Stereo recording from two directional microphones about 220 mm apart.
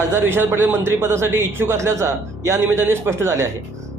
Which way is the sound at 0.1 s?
10° right (ahead or behind).